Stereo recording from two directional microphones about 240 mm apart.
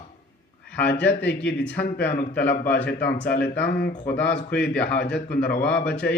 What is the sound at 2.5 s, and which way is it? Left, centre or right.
A man's voice, left.